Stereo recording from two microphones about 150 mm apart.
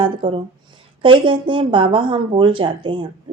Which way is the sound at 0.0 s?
35° right (ahead or behind).